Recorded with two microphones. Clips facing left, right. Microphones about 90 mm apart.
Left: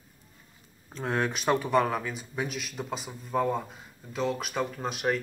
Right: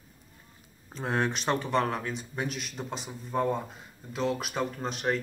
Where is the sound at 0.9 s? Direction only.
Centre (ahead or behind).